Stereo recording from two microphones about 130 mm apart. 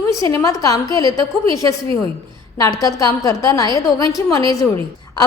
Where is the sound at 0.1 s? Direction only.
25° left (ahead or behind).